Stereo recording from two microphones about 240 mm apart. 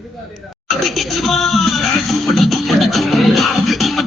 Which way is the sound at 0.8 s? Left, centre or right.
Centre.